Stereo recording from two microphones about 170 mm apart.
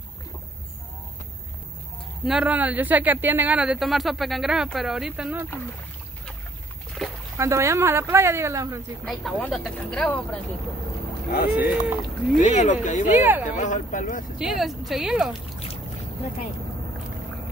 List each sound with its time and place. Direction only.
2.2 s a man's voice: 5° right (ahead or behind)
7.0 s a sound: 5° left (ahead or behind)
7.3 s speech: 15° right (ahead or behind)
9.0 s a man's voice: 5° left (ahead or behind)
11.3 s speech: 65° left (ahead or behind)
12.4 s speech: 45° left (ahead or behind)
13.2 s speech: 10° right (ahead or behind)
13.6 s speech: 45° left (ahead or behind)
14.4 s a man's voice: centre (ahead or behind)